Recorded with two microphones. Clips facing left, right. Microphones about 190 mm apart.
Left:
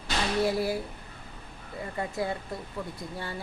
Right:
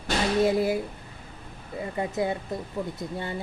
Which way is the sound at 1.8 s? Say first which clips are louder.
Right 4 dB; 20° right (ahead or behind).